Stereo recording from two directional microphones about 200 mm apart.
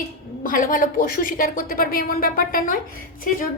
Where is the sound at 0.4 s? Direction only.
40° left (ahead or behind).